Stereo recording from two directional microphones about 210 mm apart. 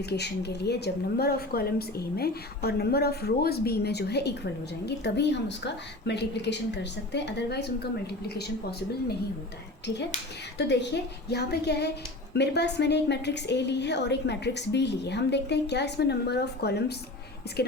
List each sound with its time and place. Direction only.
0.0 s a woman's voice: 50° left (ahead or behind)
10.6 s a woman's voice: 55° left (ahead or behind)